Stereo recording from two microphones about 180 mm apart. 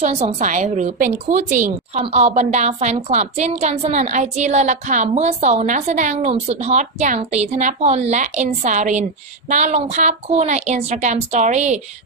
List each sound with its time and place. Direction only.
0.0 s a woman's voice: 35° right (ahead or behind)